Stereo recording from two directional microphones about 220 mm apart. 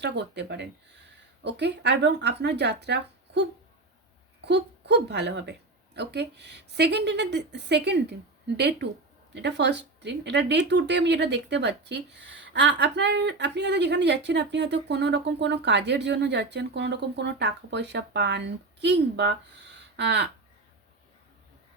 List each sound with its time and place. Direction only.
0.0 s speech: 50° right (ahead or behind)